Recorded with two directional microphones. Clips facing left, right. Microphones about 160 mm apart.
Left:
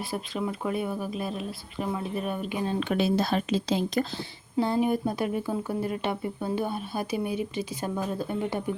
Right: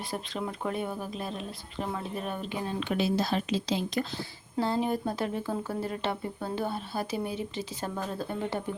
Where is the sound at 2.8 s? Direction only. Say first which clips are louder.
Left 2 dB; 50° left (ahead or behind).